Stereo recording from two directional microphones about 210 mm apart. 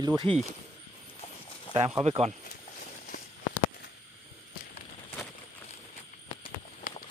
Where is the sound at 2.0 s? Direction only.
30° right (ahead or behind).